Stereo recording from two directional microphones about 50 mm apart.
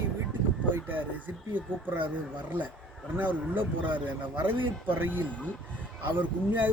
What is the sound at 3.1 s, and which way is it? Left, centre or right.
Speech, right.